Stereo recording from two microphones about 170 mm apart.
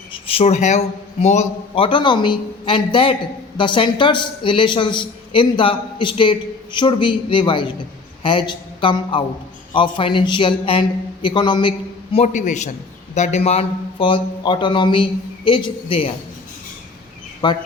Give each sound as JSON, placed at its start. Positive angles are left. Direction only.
{"t": 0.1, "sound": "a man's voice", "side_deg": 35}
{"t": 12.1, "sound": "a man's voice", "side_deg": 45}
{"t": 17.4, "sound": "a woman's voice", "side_deg": 25}